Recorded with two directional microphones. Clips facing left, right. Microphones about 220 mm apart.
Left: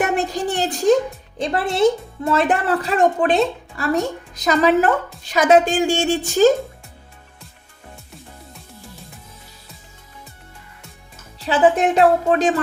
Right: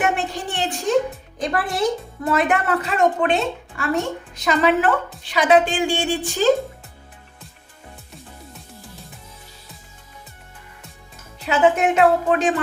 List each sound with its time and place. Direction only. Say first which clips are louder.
0.0 s a woman's voice: left 3 dB; 40° left (ahead or behind)
1.4 s a woman's voice: left 4 dB; 25° left (ahead or behind); by 6.5 s 45° left (ahead or behind)
11.3 s speech: left 2 dB; 35° left (ahead or behind)